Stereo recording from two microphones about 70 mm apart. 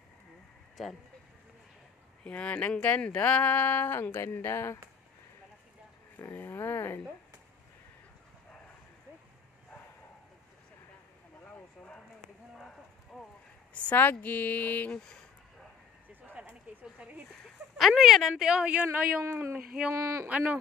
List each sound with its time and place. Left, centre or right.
0.8 s speech: centre
2.2 s speech: centre; by 4.7 s left
6.1 s speech: left
11.4 s a sound: centre
12.5 s clip-clop: centre
13.7 s speech: left
16.2 s a sound: right
17.0 s a sound: centre
17.7 s speech: centre
18.4 s speech: centre
19.2 s speech: right
20.2 s speech: centre